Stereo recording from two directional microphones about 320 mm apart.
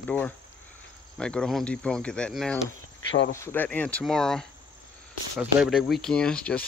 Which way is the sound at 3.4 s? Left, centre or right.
Centre.